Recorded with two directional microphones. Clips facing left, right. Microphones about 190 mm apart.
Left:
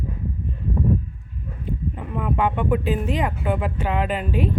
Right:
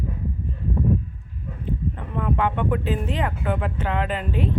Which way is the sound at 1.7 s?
10° left (ahead or behind).